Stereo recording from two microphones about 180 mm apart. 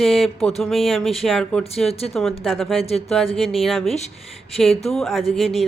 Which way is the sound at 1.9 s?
35° left (ahead or behind).